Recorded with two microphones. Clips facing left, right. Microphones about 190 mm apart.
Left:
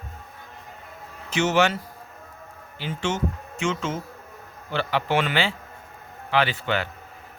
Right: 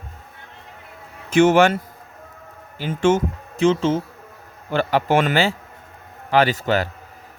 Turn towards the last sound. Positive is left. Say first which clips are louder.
# right 6 dB
turn(degrees=-40)  # may be behind; listen again after turning